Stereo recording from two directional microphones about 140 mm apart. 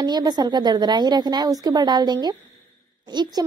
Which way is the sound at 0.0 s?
30° right (ahead or behind).